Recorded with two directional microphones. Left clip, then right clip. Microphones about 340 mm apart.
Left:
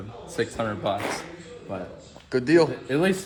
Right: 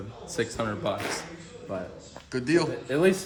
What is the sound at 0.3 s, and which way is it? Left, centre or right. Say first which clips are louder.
Speech: left 2 dB; centre.